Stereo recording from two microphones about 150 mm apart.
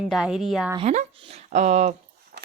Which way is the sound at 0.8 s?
50° right (ahead or behind).